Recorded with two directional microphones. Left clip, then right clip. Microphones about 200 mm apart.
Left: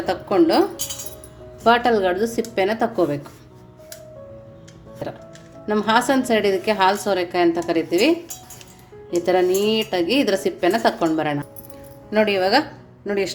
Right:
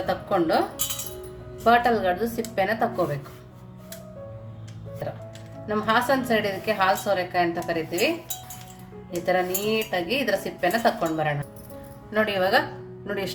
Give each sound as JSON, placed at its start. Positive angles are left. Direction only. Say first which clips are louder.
{"t": 0.3, "sound": "a woman's voice", "louder": "left 6 dB", "side_deg": 35}
{"t": 1.6, "sound": "a woman's voice", "louder": "left 3 dB", "side_deg": 35}
{"t": 5.0, "sound": "a woman's voice", "louder": "left 3 dB", "side_deg": 35}